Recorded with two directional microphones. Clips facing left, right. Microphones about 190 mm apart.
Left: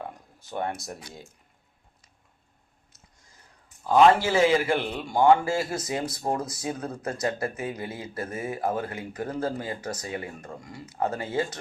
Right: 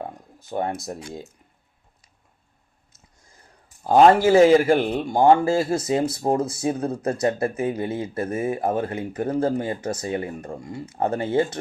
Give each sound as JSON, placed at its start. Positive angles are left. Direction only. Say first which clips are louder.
{"t": 0.5, "sound": "a man's voice", "louder": "right 5 dB", "side_deg": -25}
{"t": 3.8, "sound": "a man's voice", "louder": "right 4 dB", "side_deg": -40}